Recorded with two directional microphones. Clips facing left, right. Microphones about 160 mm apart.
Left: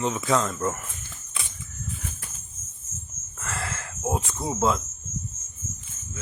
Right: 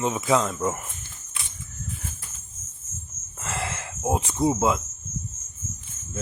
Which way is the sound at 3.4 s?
20° right (ahead or behind).